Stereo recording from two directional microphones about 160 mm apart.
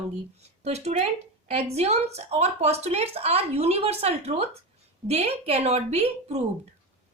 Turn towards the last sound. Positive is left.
turn(degrees=-40)  # may be behind; listen again after turning